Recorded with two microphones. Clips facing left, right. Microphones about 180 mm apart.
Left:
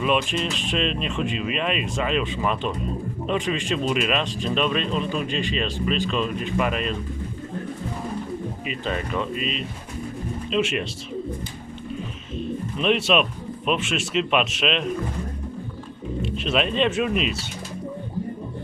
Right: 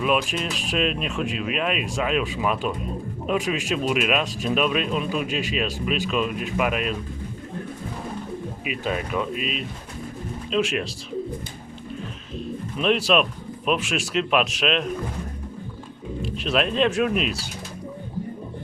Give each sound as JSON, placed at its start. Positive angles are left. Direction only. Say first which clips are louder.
{"t": 0.0, "sound": "speech", "louder": "even", "side_deg": -5}
{"t": 8.6, "sound": "speech", "louder": "right 3 dB", "side_deg": -5}
{"t": 12.4, "sound": "bird", "louder": "left 1 dB", "side_deg": 0}
{"t": 13.7, "sound": "speech", "louder": "even", "side_deg": 0}
{"t": 16.2, "sound": "speech", "louder": "even", "side_deg": 0}